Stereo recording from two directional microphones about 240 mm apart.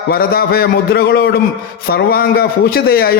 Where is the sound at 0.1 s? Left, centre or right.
Left.